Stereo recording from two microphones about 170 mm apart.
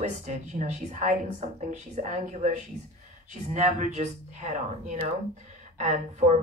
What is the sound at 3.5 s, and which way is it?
Speech, 45° right (ahead or behind).